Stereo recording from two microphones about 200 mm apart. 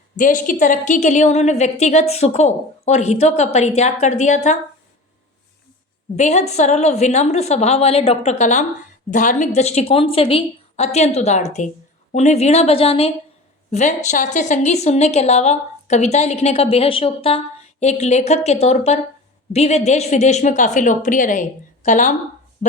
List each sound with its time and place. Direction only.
0.2 s a woman's voice: 40° left (ahead or behind)
6.1 s a woman's voice: 35° left (ahead or behind)